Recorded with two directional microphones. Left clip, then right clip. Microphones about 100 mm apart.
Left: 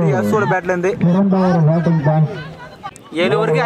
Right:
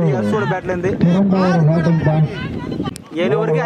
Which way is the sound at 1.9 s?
Centre (ahead or behind).